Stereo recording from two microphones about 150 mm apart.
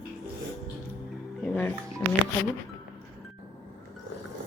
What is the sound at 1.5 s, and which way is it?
Speech, 15° left (ahead or behind).